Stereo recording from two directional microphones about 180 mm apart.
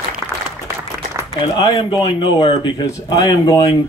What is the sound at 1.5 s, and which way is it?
Speech, 25° left (ahead or behind).